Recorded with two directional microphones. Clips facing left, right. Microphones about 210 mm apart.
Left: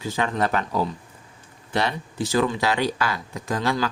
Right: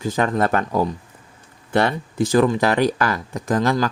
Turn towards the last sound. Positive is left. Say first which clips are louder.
# right 5 dB
turn(degrees=-40)  # may be behind; listen again after turning